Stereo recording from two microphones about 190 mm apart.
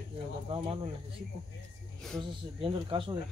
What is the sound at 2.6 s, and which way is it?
Speech, 25° right (ahead or behind).